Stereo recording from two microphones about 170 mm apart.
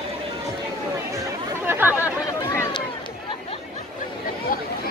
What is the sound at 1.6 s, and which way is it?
Chatter, 15° right (ahead or behind).